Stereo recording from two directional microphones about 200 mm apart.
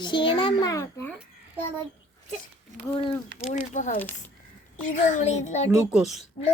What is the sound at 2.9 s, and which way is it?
Speech, 25° left (ahead or behind).